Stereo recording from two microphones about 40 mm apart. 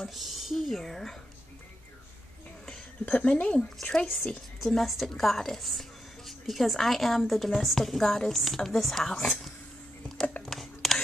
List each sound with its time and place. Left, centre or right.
0.1 s a woman's voice: centre
2.7 s speech: left
3.8 s a woman's voice: left
4.6 s a woman's voice: centre
10.4 s a sound: centre